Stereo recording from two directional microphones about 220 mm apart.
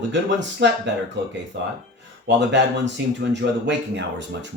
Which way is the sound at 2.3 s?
55° right (ahead or behind).